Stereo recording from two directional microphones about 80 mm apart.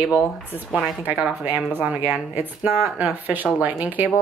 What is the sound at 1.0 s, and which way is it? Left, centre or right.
Speech, centre.